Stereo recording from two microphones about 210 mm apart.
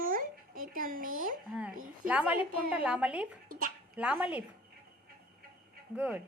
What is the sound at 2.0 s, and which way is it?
A woman's voice, 5° right (ahead or behind).